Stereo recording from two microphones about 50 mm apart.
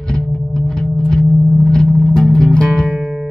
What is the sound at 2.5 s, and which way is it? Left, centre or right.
Music, centre.